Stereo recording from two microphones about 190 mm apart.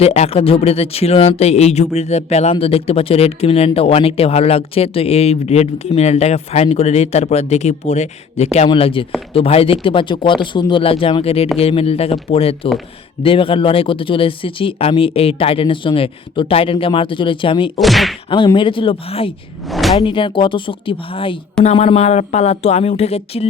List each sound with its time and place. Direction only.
0.0 s speech: 35° left (ahead or behind)
17.7 s whack: centre (ahead or behind)
18.3 s speech: 25° left (ahead or behind)
19.6 s speech: centre (ahead or behind)
20.0 s speech: 25° left (ahead or behind)